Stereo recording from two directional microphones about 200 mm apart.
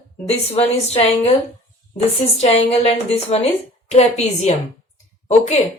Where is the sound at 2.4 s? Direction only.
30° left (ahead or behind).